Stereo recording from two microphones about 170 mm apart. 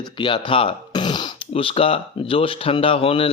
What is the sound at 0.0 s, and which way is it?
Speech, 25° left (ahead or behind).